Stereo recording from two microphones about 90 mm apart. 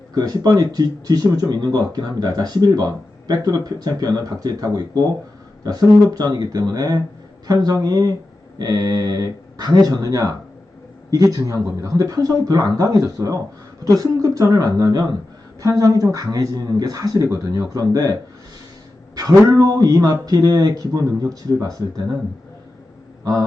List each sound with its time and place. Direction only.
0.1 s speech: 50° right (ahead or behind)
19.1 s speech: 45° right (ahead or behind)